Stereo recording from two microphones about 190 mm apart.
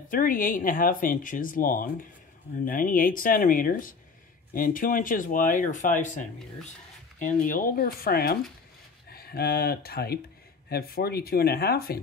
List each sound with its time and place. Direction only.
0.1 s speech: 45° left (ahead or behind)